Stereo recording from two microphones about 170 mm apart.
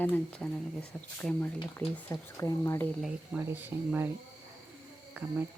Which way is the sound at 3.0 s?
10° right (ahead or behind).